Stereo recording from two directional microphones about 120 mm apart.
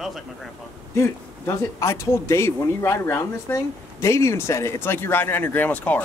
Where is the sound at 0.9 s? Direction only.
25° left (ahead or behind).